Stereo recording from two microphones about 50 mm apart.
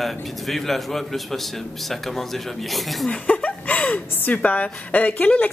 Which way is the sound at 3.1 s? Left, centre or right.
Left.